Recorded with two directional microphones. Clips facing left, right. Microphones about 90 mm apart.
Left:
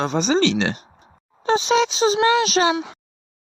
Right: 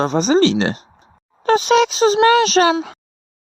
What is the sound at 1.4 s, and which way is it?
Speech, 55° right (ahead or behind).